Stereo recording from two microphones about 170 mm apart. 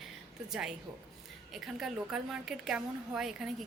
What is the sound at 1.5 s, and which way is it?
A woman's voice, 5° right (ahead or behind).